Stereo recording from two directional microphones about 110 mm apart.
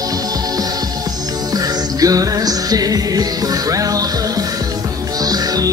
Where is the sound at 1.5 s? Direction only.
35° right (ahead or behind).